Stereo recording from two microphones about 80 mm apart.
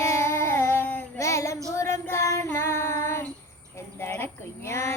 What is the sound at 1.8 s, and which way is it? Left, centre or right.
Music, left.